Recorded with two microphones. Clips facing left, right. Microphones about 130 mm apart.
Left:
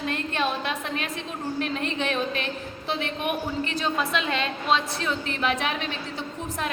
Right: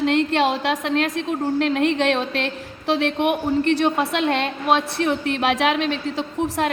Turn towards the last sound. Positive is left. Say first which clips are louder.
# right 9 dB
turn(degrees=-90)